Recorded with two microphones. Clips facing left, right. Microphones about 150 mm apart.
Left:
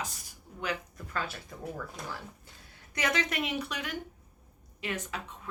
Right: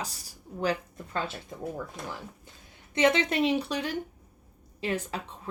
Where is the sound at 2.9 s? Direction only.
25° right (ahead or behind).